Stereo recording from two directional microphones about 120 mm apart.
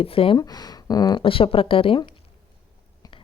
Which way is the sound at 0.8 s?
35° left (ahead or behind).